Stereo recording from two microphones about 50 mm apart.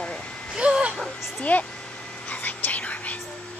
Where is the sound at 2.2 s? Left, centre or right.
Left.